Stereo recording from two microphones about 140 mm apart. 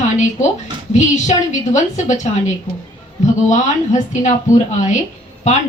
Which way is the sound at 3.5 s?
60° left (ahead or behind).